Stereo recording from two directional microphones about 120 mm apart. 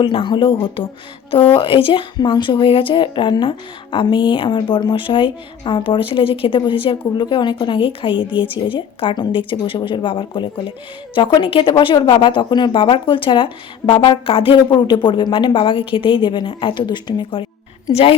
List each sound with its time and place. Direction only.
0.0 s a woman's voice: 45° left (ahead or behind)